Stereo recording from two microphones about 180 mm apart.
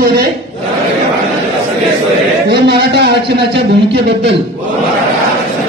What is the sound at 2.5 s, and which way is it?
Speech, 70° right (ahead or behind).